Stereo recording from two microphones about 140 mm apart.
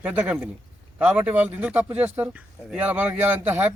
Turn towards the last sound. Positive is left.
turn(degrees=-15)  # may be behind; listen again after turning